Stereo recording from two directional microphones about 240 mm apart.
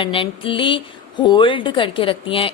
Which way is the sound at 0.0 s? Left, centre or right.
Left.